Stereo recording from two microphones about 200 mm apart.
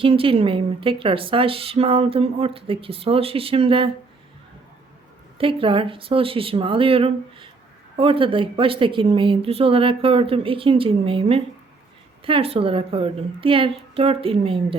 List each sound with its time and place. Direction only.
0.0 s speech: 25° right (ahead or behind)
5.4 s speech: 25° right (ahead or behind)